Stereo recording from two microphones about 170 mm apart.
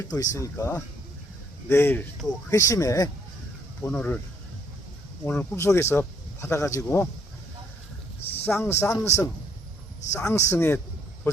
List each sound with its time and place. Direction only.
0.0 s speech: 20° left (ahead or behind)
5.2 s speech: 10° left (ahead or behind)
8.4 s speech: 15° left (ahead or behind)